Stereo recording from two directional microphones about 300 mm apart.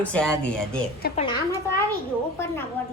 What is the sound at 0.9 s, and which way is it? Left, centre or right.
Speech, left.